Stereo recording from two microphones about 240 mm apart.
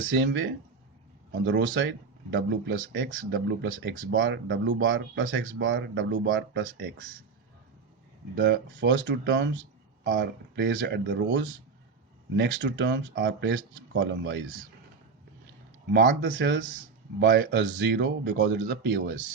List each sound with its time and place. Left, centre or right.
0.2 s speech: right
8.4 s speech: right
14.0 s speech: right
15.9 s speech: right